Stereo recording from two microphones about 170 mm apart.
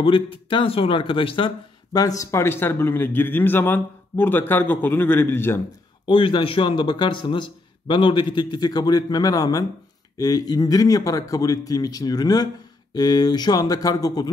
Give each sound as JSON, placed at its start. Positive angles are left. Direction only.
{"t": 0.0, "sound": "speech", "side_deg": 30}
{"t": 6.0, "sound": "a man's voice", "side_deg": 30}